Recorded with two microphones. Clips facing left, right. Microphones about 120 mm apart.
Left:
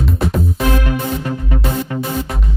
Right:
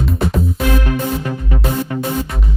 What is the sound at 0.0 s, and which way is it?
Music, centre (ahead or behind).